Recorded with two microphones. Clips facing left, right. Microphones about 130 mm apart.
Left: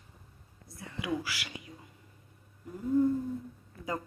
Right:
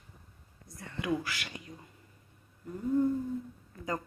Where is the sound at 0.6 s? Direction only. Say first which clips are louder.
Right 2 dB; 5° left (ahead or behind).